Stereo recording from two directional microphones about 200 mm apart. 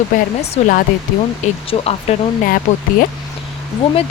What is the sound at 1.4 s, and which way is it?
Speech, 35° left (ahead or behind).